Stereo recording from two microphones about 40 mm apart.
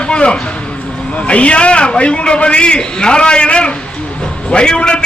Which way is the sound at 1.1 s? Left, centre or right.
Left.